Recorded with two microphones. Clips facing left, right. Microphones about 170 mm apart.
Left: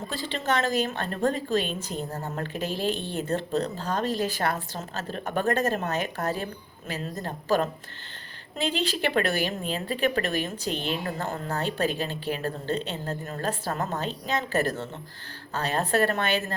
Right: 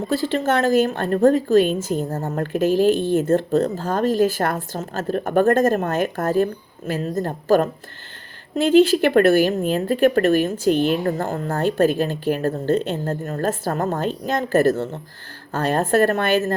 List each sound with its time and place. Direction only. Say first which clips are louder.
0.1 s a woman's voice: right 8 dB; 45° right (ahead or behind)